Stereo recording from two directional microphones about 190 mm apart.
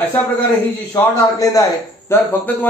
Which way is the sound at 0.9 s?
20° left (ahead or behind).